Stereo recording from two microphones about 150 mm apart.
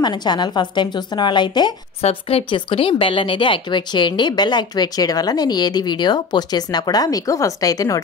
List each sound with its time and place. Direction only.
0.0 s a woman's voice: 30° left (ahead or behind)
2.0 s a woman's voice: 40° left (ahead or behind); by 8.0 s 25° left (ahead or behind)